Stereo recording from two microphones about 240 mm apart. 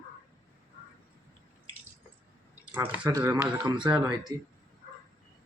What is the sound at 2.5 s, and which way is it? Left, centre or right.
Speech, centre.